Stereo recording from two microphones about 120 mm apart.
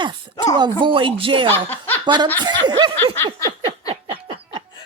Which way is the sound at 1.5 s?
15° left (ahead or behind).